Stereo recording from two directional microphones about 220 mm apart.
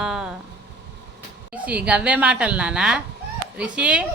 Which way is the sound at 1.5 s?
5° right (ahead or behind).